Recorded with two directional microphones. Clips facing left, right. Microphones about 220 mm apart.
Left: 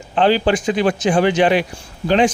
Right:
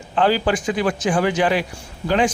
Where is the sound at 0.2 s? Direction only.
25° left (ahead or behind).